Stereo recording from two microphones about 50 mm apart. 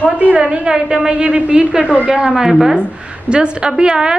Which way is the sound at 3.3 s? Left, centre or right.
Centre.